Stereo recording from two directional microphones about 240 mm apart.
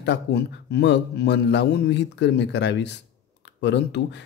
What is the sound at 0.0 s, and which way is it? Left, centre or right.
Speech, left.